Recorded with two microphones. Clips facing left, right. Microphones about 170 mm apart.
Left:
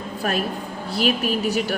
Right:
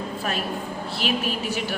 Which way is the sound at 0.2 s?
45° left (ahead or behind).